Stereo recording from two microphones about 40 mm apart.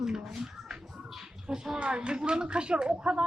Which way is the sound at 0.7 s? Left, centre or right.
Centre.